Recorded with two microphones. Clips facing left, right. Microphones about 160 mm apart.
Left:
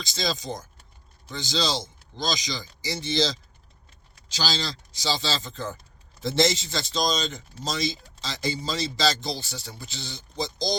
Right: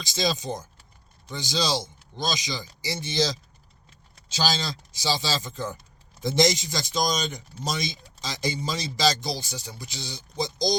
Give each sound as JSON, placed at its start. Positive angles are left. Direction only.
{"t": 0.1, "sound": "speech", "side_deg": -20}